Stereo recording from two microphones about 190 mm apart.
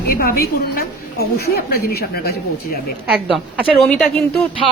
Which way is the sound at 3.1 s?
5° right (ahead or behind).